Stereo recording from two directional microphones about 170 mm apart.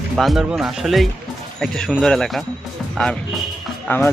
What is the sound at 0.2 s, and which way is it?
Speech, centre (ahead or behind).